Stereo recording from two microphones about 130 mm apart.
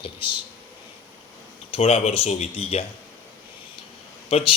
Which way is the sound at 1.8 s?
55° left (ahead or behind).